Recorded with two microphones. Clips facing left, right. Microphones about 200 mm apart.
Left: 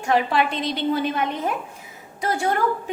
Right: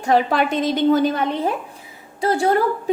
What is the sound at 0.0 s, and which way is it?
A woman's voice, 40° right (ahead or behind).